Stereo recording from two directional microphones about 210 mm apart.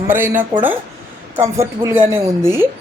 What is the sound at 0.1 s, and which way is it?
A woman's voice, 10° right (ahead or behind).